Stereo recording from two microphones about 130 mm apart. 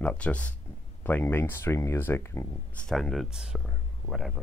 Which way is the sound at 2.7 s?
5° left (ahead or behind).